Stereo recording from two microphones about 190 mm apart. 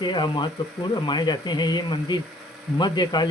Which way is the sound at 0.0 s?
25° left (ahead or behind).